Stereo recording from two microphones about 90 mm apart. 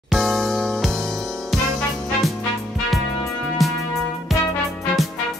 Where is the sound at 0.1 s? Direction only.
Centre (ahead or behind).